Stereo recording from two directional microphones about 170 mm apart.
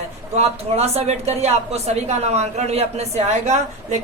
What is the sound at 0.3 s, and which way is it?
A woman's voice, 40° right (ahead or behind).